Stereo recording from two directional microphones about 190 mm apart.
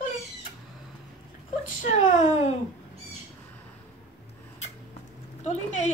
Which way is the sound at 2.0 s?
40° left (ahead or behind).